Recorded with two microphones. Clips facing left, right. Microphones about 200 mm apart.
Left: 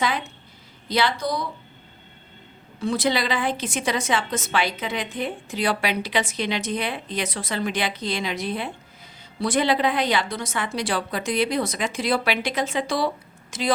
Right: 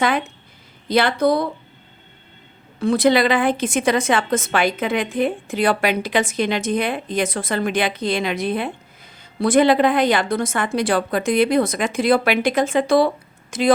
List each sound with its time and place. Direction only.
0.9 s a woman's voice: 55° right (ahead or behind)
2.8 s a woman's voice: 55° right (ahead or behind)